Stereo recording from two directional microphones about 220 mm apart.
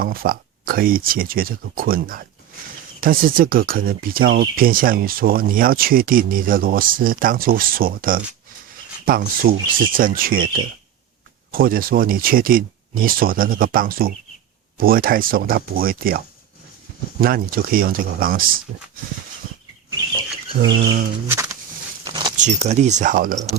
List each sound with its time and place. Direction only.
0.0 s speech: 40° right (ahead or behind)
20.6 s bird: 55° right (ahead or behind)
21.2 s a sound: 15° right (ahead or behind)
22.4 s speech: 30° right (ahead or behind)